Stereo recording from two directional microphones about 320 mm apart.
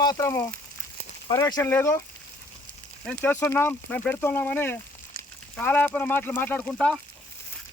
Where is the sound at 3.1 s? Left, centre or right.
Centre.